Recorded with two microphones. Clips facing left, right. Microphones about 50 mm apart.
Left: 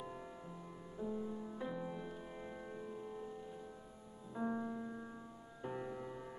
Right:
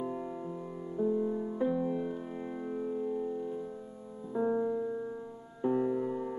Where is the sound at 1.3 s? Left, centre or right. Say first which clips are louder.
Right 11 dB; right.